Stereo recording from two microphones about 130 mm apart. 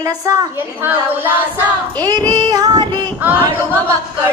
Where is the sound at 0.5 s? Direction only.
15° right (ahead or behind).